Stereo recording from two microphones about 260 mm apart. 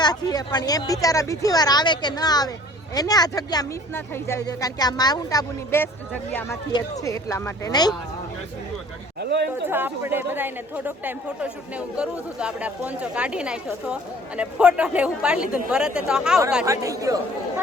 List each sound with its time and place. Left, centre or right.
0.0 s speech: centre
9.1 s speech: right
9.6 s speech: centre